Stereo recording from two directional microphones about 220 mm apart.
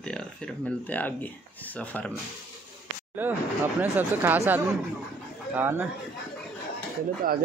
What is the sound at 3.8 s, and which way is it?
Speech, 10° right (ahead or behind).